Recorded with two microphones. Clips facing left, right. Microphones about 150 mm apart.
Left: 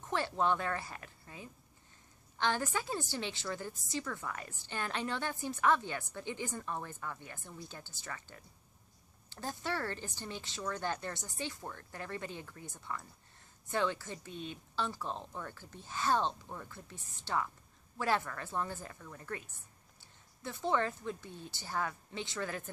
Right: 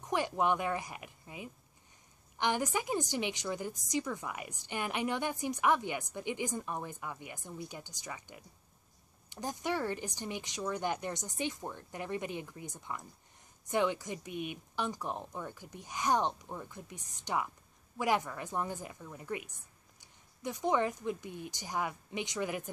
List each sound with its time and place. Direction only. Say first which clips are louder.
0.0 s a woman's voice: right 2 dB; 15° right (ahead or behind)